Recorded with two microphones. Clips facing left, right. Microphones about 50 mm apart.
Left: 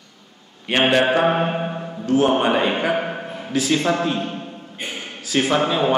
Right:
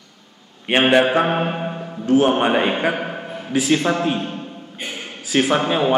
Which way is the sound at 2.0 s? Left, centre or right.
Right.